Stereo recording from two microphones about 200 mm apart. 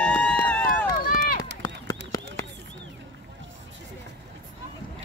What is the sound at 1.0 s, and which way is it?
Run, 45° left (ahead or behind).